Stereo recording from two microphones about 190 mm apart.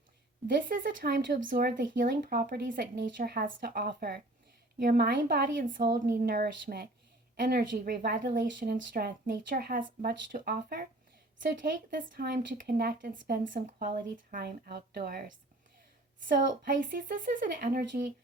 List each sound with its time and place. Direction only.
0.4 s speech: 45° right (ahead or behind)
16.6 s speech: 45° right (ahead or behind)